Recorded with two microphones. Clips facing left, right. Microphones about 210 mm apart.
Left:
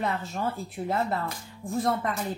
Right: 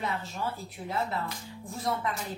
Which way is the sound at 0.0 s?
50° left (ahead or behind).